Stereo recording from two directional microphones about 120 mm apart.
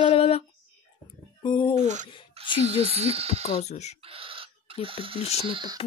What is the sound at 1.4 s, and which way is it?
Speech, 40° left (ahead or behind).